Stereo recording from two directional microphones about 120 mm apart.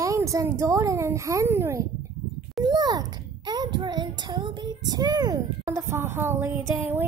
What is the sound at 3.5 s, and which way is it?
Child singing, 40° right (ahead or behind).